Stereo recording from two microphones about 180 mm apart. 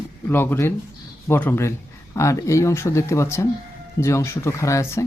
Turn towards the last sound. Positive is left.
turn(degrees=15)  # may be behind; listen again after turning